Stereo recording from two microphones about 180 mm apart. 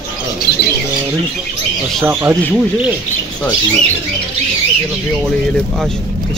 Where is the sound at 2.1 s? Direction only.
10° right (ahead or behind).